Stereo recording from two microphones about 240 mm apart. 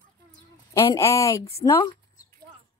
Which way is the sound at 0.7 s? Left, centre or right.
Centre.